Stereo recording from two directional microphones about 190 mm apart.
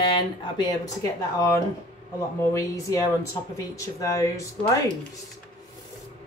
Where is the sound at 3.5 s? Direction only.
15° left (ahead or behind).